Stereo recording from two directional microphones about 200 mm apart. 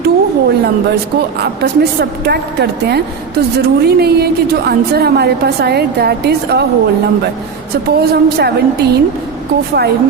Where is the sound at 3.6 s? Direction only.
50° right (ahead or behind).